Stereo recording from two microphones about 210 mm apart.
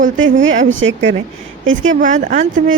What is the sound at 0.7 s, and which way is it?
Speech, 60° right (ahead or behind).